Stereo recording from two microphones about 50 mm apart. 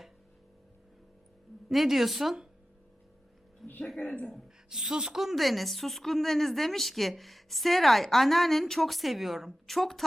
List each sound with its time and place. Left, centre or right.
1.7 s a woman's voice: centre
3.6 s music: centre
4.0 s speech: left
4.4 s speech: centre
5.2 s a woman's voice: centre